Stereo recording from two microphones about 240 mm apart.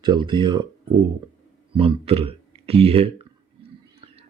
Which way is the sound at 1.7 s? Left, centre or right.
Right.